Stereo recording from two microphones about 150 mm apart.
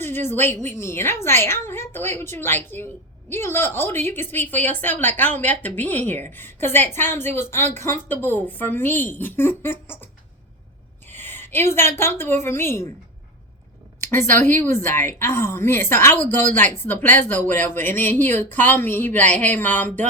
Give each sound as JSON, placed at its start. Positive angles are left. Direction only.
{"t": 0.0, "sound": "a woman's voice", "side_deg": 15}
{"t": 11.1, "sound": "a sound", "side_deg": 15}
{"t": 11.7, "sound": "a woman's voice", "side_deg": 15}
{"t": 14.0, "sound": "a woman's voice", "side_deg": 15}